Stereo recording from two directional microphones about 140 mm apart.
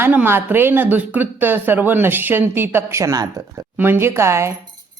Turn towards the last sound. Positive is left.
turn(degrees=-20)  # may be behind; listen again after turning